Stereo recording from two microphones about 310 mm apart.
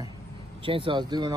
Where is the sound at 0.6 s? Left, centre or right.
Centre.